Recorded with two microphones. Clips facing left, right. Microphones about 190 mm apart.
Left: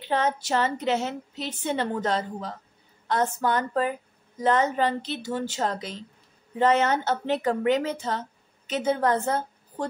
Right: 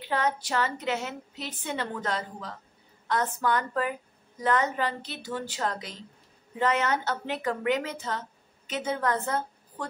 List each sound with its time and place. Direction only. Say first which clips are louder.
0.1 s a woman's voice: left 3 dB; 25° left (ahead or behind)